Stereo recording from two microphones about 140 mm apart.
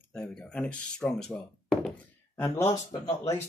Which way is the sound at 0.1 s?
10° left (ahead or behind).